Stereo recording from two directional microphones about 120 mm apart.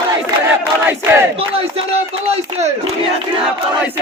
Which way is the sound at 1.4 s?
55° right (ahead or behind).